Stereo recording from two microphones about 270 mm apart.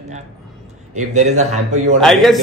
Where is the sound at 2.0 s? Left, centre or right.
Centre.